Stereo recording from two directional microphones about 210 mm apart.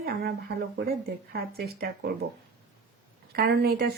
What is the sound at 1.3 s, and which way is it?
Speech, 45° right (ahead or behind).